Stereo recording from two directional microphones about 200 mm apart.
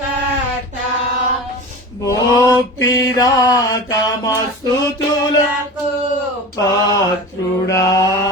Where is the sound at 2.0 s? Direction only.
15° left (ahead or behind).